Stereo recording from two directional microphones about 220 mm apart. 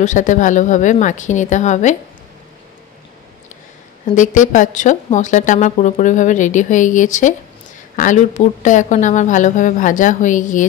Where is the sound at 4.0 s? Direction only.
35° left (ahead or behind).